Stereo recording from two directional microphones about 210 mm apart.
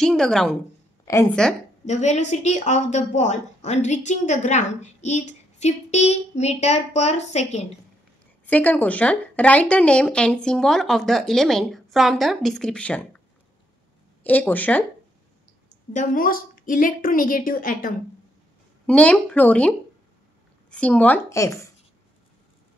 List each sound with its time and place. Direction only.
0.0 s speech: 5° left (ahead or behind)
1.1 s speech: 15° left (ahead or behind)
1.9 s a woman's voice: 35° left (ahead or behind)
8.5 s speech: 5° left (ahead or behind)
14.2 s speech: 10° left (ahead or behind)
15.9 s a woman's voice: 40° left (ahead or behind)
18.9 s speech: 5° left (ahead or behind)
20.7 s speech: 5° left (ahead or behind)